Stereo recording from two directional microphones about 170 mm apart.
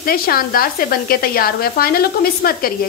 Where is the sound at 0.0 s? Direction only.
60° left (ahead or behind).